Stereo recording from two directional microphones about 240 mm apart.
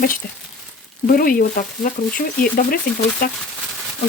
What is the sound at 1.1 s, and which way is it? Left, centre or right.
Speech, left.